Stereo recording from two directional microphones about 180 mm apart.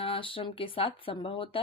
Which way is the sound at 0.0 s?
30° left (ahead or behind).